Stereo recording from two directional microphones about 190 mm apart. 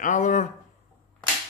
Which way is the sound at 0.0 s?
40° left (ahead or behind).